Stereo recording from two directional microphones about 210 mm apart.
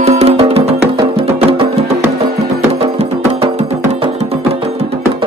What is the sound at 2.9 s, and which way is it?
Music, 30° right (ahead or behind).